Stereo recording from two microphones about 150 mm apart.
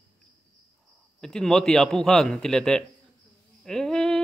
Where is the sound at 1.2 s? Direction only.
5° left (ahead or behind).